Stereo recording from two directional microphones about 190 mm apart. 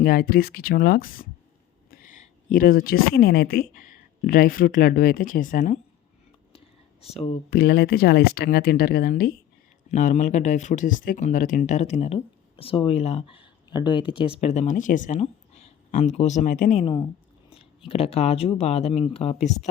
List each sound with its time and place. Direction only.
0.0 s speech: 50° left (ahead or behind)
6.5 s whispering: 30° left (ahead or behind)
7.5 s speech: 55° left (ahead or behind)
9.9 s speech: 40° left (ahead or behind)
16.8 s speech: 25° left (ahead or behind)